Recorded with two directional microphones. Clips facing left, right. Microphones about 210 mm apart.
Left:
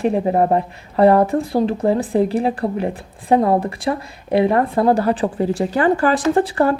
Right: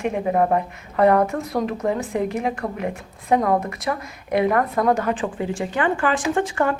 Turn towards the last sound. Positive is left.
turn(degrees=35)  # may be behind; listen again after turning